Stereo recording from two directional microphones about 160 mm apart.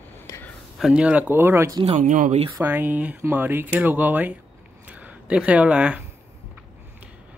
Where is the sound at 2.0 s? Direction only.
55° right (ahead or behind).